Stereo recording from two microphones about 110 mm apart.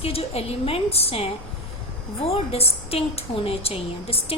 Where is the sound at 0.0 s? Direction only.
65° left (ahead or behind).